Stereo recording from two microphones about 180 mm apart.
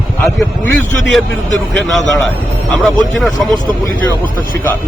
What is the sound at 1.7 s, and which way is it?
Speech, centre (ahead or behind).